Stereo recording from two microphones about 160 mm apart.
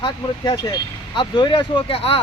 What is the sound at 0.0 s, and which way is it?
Speech, 25° left (ahead or behind).